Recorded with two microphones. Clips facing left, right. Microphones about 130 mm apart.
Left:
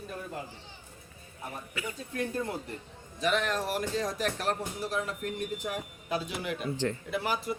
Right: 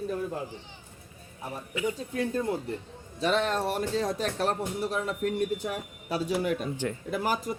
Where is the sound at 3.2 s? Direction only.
30° right (ahead or behind).